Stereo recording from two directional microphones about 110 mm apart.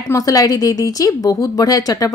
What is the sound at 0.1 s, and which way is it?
Speech, 30° left (ahead or behind).